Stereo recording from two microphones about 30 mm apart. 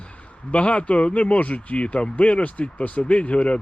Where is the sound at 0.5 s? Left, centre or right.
Left.